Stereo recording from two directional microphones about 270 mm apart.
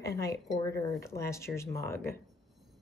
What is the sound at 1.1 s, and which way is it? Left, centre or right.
Speech, centre.